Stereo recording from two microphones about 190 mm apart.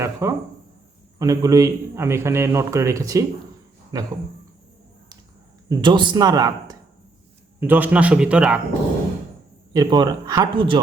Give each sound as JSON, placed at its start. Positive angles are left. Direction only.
{"t": 0.0, "sound": "a man's voice", "side_deg": -15}
{"t": 5.6, "sound": "speech", "side_deg": -25}
{"t": 7.6, "sound": "a man's voice", "side_deg": -10}
{"t": 9.7, "sound": "speech", "side_deg": -20}